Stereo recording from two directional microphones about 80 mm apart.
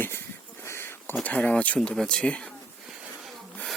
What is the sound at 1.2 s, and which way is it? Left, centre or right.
Speech, centre.